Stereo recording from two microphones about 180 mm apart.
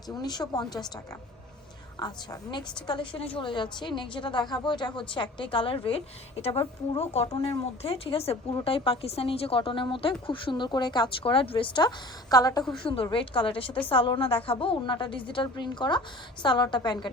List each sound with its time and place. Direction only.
0.1 s a woman's voice: 25° left (ahead or behind)
2.0 s a woman's voice: 20° left (ahead or behind)